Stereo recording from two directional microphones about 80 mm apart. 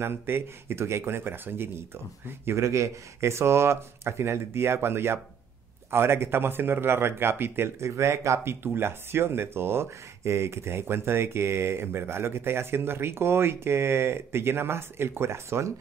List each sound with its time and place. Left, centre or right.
0.0 s speech: right